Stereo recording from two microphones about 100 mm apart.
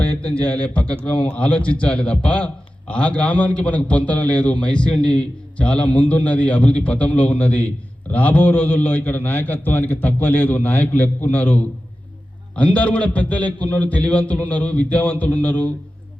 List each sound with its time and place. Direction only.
0.0 s a man's voice: 15° left (ahead or behind)